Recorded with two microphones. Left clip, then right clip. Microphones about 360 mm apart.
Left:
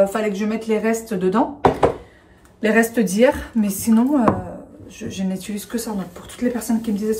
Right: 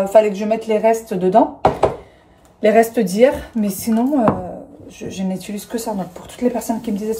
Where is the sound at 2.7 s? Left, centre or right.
Centre.